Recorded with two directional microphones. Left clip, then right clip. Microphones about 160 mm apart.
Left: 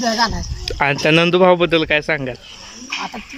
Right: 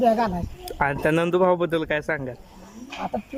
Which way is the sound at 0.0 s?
15° right (ahead or behind).